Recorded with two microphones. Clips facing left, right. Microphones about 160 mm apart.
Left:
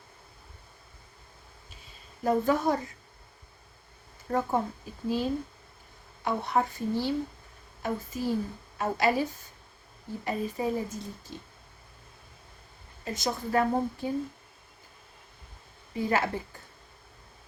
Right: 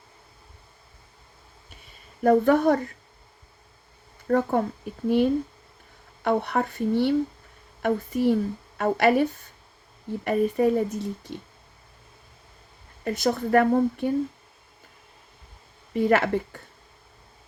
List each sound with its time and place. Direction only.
2.2 s speech: 65° right (ahead or behind)
4.3 s speech: 65° right (ahead or behind)
13.1 s speech: 60° right (ahead or behind)
15.9 s speech: 65° right (ahead or behind)